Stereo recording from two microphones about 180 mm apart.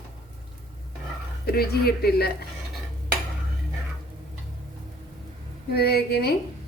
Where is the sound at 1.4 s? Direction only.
60° left (ahead or behind).